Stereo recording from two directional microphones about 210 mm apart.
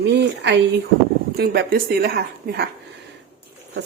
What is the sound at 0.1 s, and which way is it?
Speech, 55° right (ahead or behind).